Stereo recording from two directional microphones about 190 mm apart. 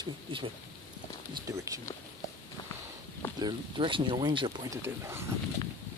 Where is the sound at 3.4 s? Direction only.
25° right (ahead or behind).